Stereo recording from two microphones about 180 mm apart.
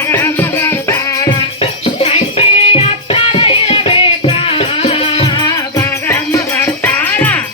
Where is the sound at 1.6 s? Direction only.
35° left (ahead or behind).